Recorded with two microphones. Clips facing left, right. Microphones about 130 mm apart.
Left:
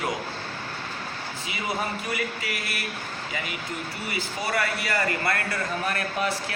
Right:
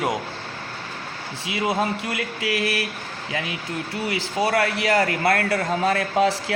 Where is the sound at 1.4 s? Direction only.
90° right.